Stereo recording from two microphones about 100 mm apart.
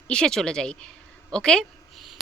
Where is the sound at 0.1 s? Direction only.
5° left (ahead or behind).